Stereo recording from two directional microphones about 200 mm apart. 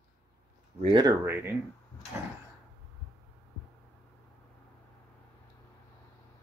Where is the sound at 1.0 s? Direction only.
10° right (ahead or behind).